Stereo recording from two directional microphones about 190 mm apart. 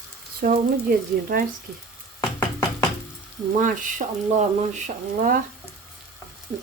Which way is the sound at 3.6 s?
45° right (ahead or behind).